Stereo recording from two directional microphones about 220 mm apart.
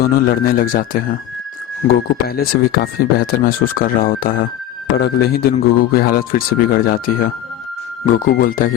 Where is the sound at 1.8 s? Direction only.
30° left (ahead or behind).